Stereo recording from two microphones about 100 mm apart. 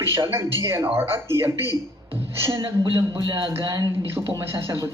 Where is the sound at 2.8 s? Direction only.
60° right (ahead or behind).